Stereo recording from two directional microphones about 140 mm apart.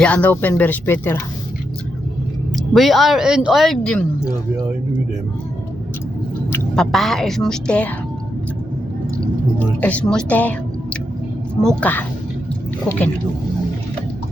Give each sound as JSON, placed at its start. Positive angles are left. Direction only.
{"t": 0.0, "sound": "speech", "side_deg": 10}
{"t": 2.7, "sound": "speech", "side_deg": 0}
{"t": 6.7, "sound": "speech", "side_deg": 0}
{"t": 9.8, "sound": "a woman's voice", "side_deg": 10}